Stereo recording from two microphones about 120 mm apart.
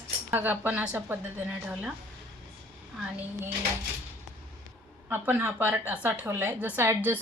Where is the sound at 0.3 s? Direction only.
15° right (ahead or behind).